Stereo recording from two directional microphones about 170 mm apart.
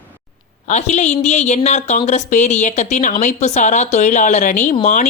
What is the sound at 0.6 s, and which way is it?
A woman's voice, 45° left (ahead or behind).